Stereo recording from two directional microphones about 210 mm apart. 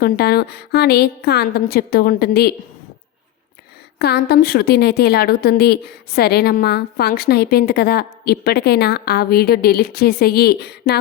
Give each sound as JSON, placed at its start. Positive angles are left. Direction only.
{"t": 0.0, "sound": "a woman's voice", "side_deg": 50}
{"t": 3.9, "sound": "a woman's voice", "side_deg": 50}